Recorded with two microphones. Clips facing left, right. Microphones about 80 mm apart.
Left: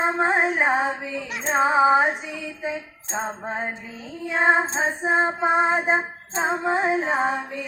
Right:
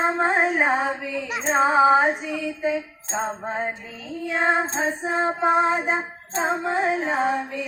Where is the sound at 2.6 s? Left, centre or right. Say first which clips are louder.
Right 4 dB; centre.